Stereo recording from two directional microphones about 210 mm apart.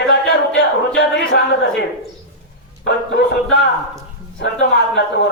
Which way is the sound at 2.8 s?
60° left (ahead or behind).